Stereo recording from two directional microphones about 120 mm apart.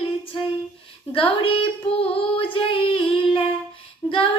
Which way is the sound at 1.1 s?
50° left (ahead or behind).